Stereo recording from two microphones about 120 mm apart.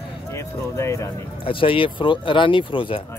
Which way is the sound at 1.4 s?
45° left (ahead or behind).